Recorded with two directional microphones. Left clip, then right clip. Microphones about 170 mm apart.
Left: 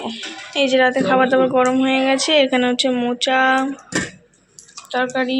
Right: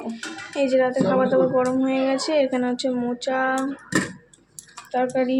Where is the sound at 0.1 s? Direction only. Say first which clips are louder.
Left 5 dB; 5° right (ahead or behind).